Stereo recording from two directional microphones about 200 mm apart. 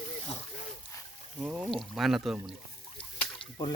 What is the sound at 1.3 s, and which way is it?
Speech, 5° right (ahead or behind).